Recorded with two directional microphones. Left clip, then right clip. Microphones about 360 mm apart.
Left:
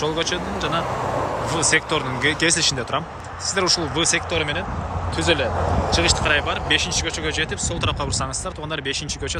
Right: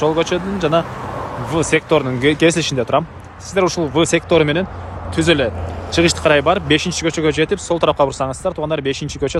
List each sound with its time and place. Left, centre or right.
0.0 s speech: centre